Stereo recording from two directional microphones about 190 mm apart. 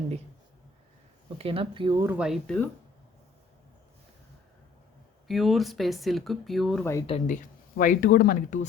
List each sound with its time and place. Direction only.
1.4 s speech: 30° right (ahead or behind)
2.1 s speech: centre (ahead or behind)
5.3 s speech: centre (ahead or behind)
7.1 s speech: 40° left (ahead or behind)